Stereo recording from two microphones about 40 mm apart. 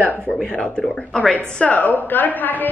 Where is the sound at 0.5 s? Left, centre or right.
Left.